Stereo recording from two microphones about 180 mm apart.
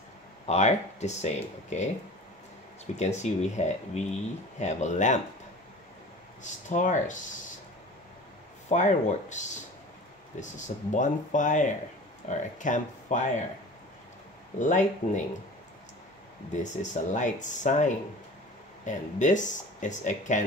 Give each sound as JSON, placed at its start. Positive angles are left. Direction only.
{"t": 0.5, "sound": "speech", "side_deg": 40}
{"t": 3.0, "sound": "speech", "side_deg": 40}
{"t": 6.4, "sound": "speech", "side_deg": 45}
{"t": 8.6, "sound": "speech", "side_deg": 40}
{"t": 14.6, "sound": "speech", "side_deg": 45}
{"t": 16.6, "sound": "speech", "side_deg": 40}